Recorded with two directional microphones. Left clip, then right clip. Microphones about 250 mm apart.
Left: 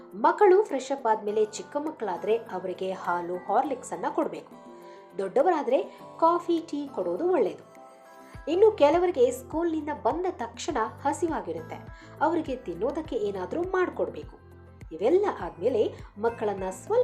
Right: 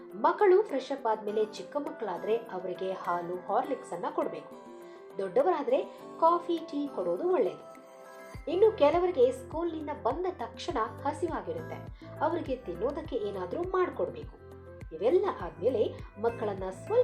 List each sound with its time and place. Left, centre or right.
0.2 s speech: left